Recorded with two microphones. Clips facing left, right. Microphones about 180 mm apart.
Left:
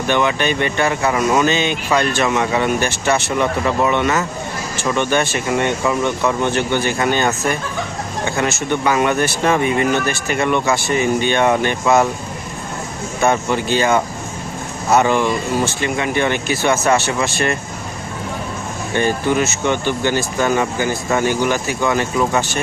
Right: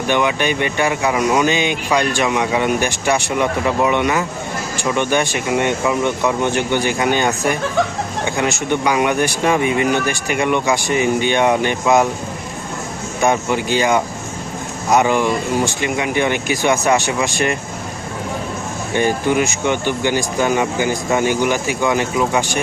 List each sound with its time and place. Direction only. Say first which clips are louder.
0.1 s speech: even; 15° right (ahead or behind)
13.2 s speech: even; 15° right (ahead or behind)
18.9 s speech: right 1 dB; 15° right (ahead or behind)